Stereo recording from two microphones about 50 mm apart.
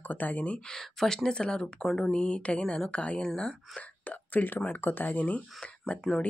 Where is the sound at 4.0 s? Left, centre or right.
Left.